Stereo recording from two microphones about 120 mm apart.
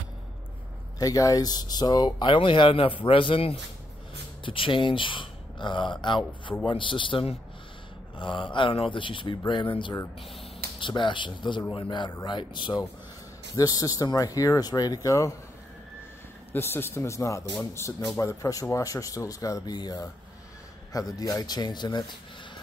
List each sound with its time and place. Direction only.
0.9 s speech: 30° left (ahead or behind)
13.6 s speech: 30° left (ahead or behind)
16.5 s speech: 20° left (ahead or behind)
21.2 s speech: 30° left (ahead or behind)